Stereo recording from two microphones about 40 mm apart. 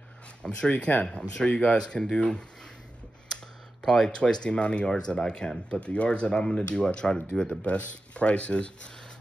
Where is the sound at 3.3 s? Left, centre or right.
Centre.